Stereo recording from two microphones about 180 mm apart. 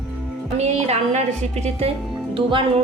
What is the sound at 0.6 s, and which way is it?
A woman's voice, 40° right (ahead or behind).